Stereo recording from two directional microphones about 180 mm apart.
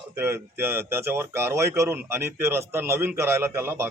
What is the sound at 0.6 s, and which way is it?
Speech, 15° right (ahead or behind).